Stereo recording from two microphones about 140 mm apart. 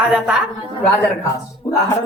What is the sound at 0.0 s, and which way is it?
Speech, 10° right (ahead or behind).